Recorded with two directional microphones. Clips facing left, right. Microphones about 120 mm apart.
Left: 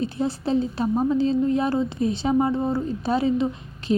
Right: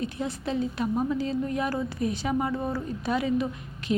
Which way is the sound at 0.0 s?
30° left (ahead or behind).